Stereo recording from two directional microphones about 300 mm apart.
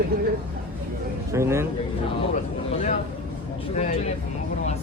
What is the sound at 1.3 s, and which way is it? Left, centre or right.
Speech, centre.